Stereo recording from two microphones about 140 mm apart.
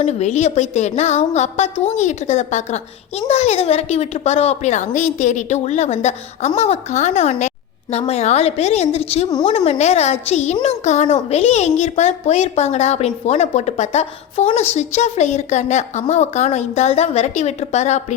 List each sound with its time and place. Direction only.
0.0 s a child's voice: 50° left (ahead or behind)